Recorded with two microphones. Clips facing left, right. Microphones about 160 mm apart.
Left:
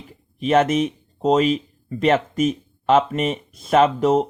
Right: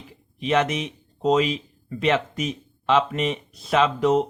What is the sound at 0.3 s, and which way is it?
Speech, 45° left (ahead or behind).